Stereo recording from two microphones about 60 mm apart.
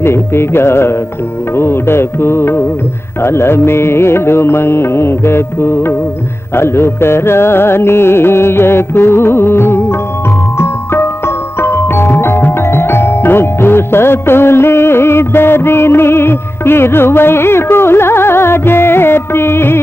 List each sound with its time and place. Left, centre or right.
0.0 s music: left